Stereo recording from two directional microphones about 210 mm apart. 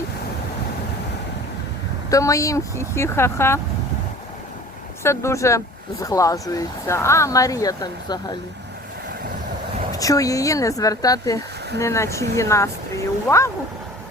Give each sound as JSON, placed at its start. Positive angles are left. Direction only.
{"t": 2.0, "sound": "speech", "side_deg": 15}
{"t": 5.0, "sound": "speech", "side_deg": 15}
{"t": 10.0, "sound": "speech", "side_deg": 15}